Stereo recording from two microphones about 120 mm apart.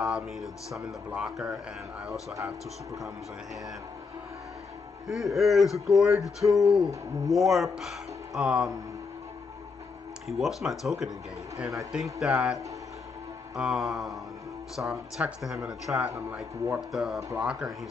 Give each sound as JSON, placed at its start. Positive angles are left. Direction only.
{"t": 0.0, "sound": "speech", "side_deg": 0}
{"t": 5.0, "sound": "speech", "side_deg": 0}
{"t": 10.2, "sound": "speech", "side_deg": 0}
{"t": 13.6, "sound": "speech", "side_deg": -5}
{"t": 15.9, "sound": "speech", "side_deg": -15}
{"t": 16.7, "sound": "speech", "side_deg": 0}